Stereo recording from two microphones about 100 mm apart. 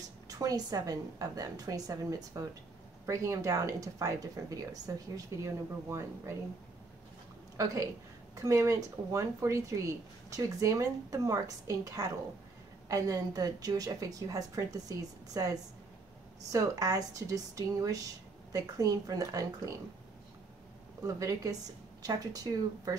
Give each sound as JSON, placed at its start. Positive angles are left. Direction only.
{"t": 0.3, "sound": "speech", "side_deg": -35}
{"t": 7.5, "sound": "speech", "side_deg": -35}
{"t": 21.0, "sound": "speech", "side_deg": -35}